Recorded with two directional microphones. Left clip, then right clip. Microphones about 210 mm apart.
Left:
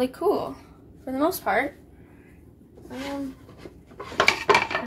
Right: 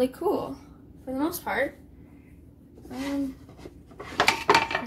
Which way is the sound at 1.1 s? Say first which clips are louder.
Left 6 dB; 45° left (ahead or behind).